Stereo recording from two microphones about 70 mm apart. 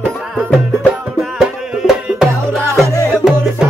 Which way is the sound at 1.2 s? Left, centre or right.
Centre.